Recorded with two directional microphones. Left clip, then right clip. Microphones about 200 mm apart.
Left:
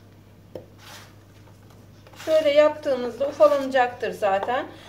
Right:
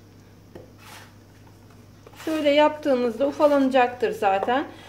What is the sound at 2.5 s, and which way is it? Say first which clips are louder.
A woman's voice: right 4 dB; 45° right (ahead or behind).